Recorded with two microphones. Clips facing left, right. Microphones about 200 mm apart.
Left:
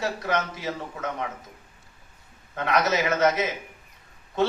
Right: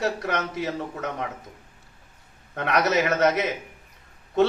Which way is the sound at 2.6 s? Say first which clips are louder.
Right 1 dB; 65° right (ahead or behind).